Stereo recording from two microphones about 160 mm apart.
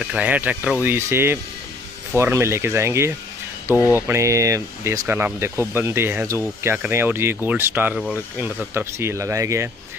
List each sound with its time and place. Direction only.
0.0 s speech: 5° right (ahead or behind)